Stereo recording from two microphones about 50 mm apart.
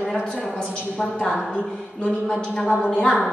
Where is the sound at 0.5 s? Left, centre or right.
Centre.